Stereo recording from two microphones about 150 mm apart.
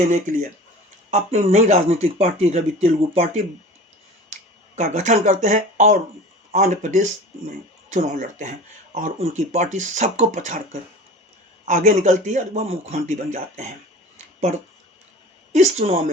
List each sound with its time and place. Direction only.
1.1 s speech: 45° right (ahead or behind)
15.5 s speech: 50° right (ahead or behind)